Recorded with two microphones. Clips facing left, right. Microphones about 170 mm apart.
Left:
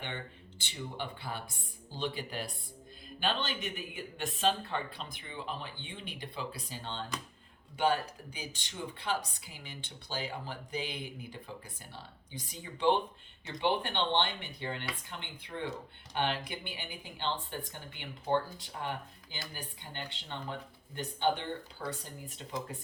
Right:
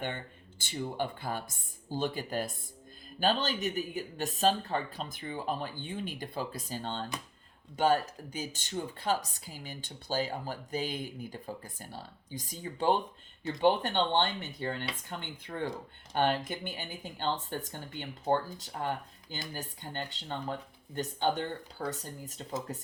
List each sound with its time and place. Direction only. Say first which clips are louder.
0.6 s speech: right 6 dB; 45° right (ahead or behind)